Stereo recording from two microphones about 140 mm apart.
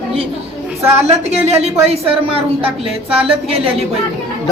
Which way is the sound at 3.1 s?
45° right (ahead or behind).